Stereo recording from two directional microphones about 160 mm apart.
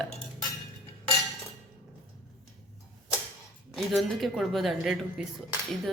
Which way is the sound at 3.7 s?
Centre (ahead or behind).